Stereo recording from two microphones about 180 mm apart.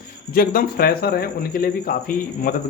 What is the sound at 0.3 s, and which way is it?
Speech, 55° left (ahead or behind).